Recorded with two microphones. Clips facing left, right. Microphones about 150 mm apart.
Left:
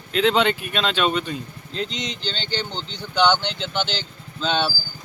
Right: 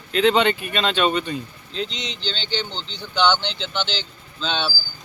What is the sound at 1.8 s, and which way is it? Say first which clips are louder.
Speech: left 1 dB; 45° left (ahead or behind).